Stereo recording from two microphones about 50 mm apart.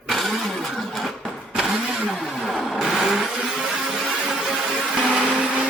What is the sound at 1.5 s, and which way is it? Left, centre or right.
Vehicle, centre.